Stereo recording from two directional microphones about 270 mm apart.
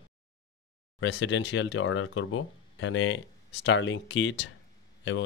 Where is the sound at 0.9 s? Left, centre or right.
Left.